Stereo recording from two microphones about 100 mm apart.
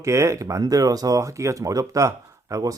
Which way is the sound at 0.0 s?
30° right (ahead or behind).